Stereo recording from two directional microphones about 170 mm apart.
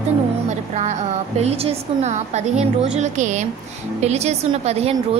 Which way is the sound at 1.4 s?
40° right (ahead or behind).